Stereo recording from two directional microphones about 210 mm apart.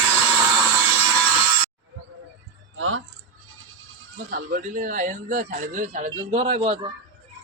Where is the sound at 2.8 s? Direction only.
70° right (ahead or behind).